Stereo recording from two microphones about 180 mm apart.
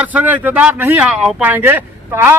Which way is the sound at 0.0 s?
10° right (ahead or behind).